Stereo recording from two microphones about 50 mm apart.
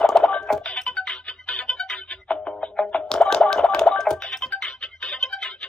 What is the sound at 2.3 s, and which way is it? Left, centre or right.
Music, left.